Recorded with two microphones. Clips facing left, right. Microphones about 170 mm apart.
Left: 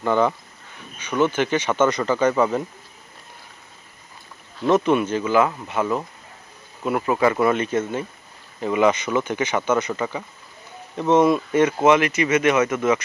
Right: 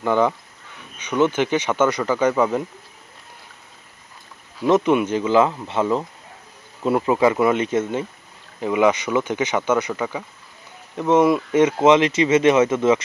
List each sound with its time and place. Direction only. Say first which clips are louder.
0.0 s speech: right 1 dB; 15° right (ahead or behind)
4.6 s speech: right 1 dB; 15° right (ahead or behind)